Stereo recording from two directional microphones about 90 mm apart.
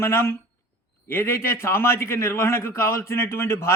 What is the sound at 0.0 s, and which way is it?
A man's voice, 30° left (ahead or behind).